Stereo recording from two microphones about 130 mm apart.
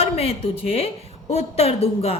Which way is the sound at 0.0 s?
50° left (ahead or behind).